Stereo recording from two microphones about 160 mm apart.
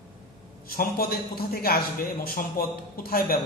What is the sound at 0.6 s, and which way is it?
A man's voice, 65° left (ahead or behind).